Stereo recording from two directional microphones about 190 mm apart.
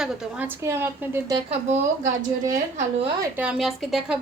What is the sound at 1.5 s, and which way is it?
Speech, 35° right (ahead or behind).